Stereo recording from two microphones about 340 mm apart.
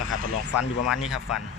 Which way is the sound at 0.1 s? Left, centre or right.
Left.